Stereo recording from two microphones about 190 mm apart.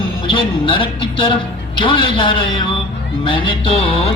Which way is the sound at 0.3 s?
25° left (ahead or behind).